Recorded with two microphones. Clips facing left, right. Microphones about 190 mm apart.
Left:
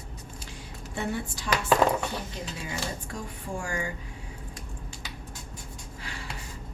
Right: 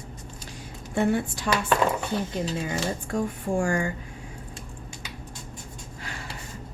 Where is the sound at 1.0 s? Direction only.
55° right (ahead or behind).